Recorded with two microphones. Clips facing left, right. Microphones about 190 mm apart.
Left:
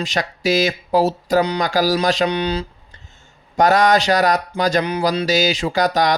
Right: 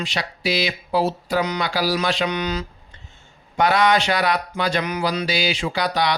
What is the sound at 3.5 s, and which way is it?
Speech, 40° left (ahead or behind).